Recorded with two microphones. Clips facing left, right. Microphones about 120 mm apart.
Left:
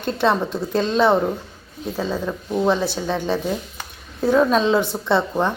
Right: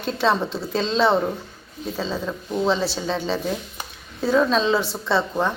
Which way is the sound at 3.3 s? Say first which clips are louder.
Left 2 dB; 5° left (ahead or behind).